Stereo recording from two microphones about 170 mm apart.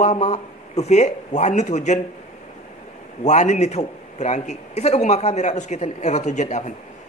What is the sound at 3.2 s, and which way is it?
A man's voice, 45° left (ahead or behind).